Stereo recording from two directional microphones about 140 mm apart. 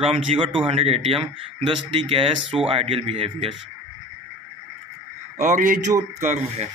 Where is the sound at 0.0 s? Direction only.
40° right (ahead or behind).